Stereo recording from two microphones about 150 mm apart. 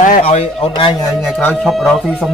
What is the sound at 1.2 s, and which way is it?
Speech, centre (ahead or behind).